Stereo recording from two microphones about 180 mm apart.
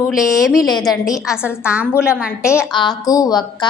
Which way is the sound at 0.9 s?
20° left (ahead or behind).